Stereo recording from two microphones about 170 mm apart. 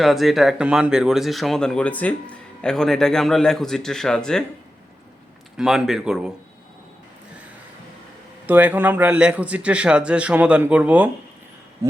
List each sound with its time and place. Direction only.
0.0 s speech: centre (ahead or behind)
5.5 s speech: 5° right (ahead or behind)
8.4 s a man's voice: 10° right (ahead or behind)